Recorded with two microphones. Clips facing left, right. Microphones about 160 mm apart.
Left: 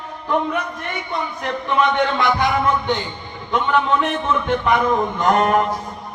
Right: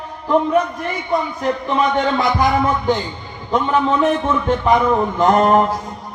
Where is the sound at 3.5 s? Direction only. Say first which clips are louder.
Right 2 dB; 35° right (ahead or behind).